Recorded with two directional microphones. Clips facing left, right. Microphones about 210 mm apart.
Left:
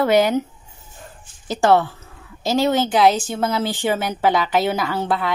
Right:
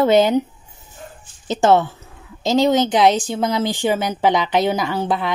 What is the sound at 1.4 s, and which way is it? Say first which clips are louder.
Speech: right 1 dB; 20° right (ahead or behind).